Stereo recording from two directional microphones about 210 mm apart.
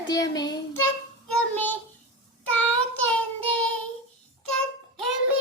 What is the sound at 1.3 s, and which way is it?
Child singing, 10° left (ahead or behind).